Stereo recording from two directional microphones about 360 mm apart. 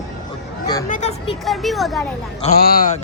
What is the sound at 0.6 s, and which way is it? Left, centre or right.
Speech, centre.